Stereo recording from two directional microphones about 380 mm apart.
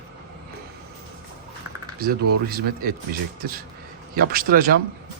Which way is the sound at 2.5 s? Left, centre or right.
Right.